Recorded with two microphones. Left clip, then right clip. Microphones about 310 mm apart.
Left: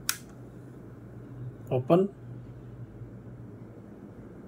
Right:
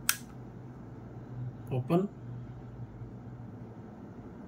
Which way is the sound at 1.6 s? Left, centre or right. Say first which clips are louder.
Left 7 dB; centre.